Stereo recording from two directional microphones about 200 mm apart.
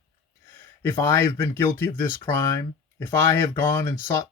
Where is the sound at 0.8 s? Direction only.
15° left (ahead or behind).